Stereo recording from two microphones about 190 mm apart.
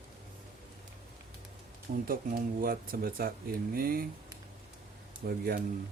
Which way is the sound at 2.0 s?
50° right (ahead or behind).